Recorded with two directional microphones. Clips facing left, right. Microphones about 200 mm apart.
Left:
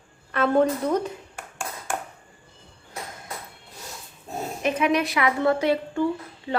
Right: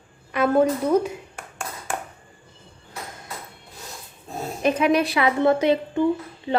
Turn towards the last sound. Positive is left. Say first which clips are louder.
# right 3 dB
turn(degrees=-20)  # may be behind; listen again after turning